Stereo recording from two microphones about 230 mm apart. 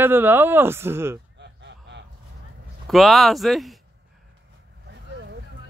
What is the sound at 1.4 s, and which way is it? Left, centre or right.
Honk, right.